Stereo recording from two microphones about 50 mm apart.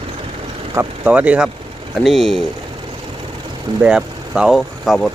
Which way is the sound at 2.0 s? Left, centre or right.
Centre.